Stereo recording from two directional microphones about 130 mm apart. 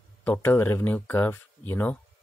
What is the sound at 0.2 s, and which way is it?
Speech, 15° left (ahead or behind).